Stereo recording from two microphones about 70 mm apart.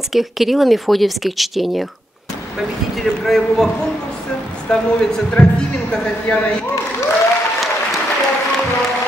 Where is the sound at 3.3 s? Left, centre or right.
Centre.